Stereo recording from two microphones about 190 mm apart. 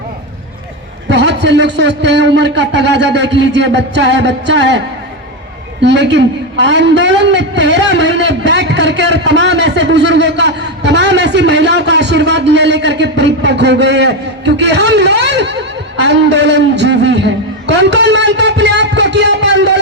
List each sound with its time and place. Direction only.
1.0 s a man's voice: 65° right (ahead or behind)
5.8 s a man's voice: 65° right (ahead or behind)